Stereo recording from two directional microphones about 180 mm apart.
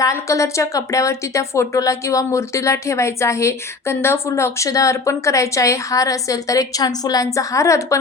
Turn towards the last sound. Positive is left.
turn(degrees=15)  # may be behind; listen again after turning